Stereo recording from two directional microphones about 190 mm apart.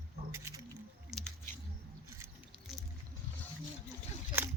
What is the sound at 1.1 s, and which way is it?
Squish, centre (ahead or behind).